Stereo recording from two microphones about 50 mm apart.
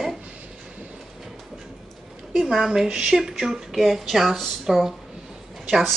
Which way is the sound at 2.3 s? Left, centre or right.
Centre.